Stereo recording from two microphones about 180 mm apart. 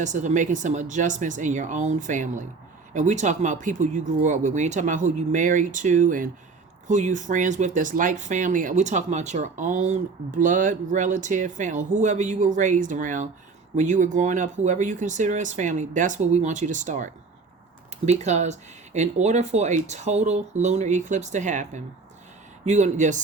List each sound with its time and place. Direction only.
0.0 s speech: 45° right (ahead or behind)